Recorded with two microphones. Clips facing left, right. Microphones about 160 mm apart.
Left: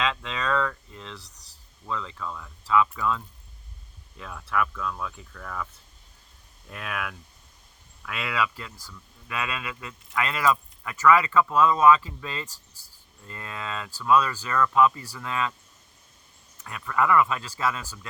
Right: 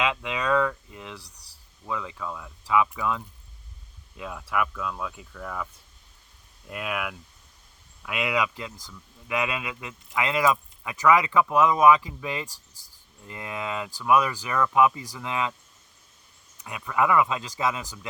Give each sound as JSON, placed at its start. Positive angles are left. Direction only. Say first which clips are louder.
{"t": 0.0, "sound": "a sound", "louder": "right 2 dB", "side_deg": -15}
{"t": 1.9, "sound": "speech", "louder": "right 1 dB", "side_deg": -10}
{"t": 6.7, "sound": "speech", "louder": "right 3 dB", "side_deg": -15}
{"t": 16.6, "sound": "speech", "louder": "even", "side_deg": -15}